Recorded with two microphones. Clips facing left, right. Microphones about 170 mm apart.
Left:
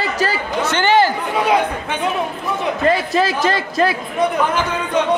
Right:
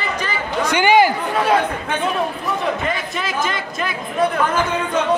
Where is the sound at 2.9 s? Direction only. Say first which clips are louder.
Left 8 dB; 30° left (ahead or behind).